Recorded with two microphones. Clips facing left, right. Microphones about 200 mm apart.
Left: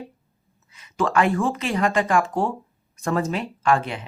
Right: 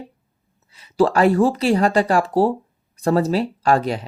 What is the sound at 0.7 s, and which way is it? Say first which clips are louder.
Speech: right 6 dB; 35° right (ahead or behind).